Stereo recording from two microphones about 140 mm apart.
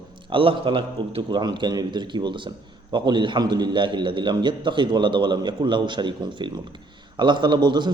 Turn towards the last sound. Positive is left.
turn(degrees=-30)  # may be behind; listen again after turning